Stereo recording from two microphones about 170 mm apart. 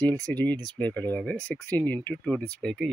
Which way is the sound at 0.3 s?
10° left (ahead or behind).